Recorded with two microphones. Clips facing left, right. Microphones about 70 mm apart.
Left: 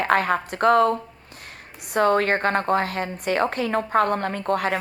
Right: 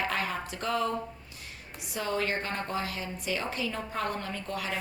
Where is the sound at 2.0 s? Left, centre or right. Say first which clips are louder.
Left 11 dB; left.